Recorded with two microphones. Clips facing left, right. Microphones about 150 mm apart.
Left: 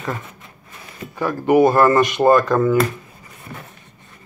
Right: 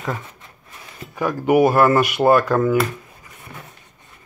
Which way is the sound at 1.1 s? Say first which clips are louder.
Left 1 dB; 15° right (ahead or behind).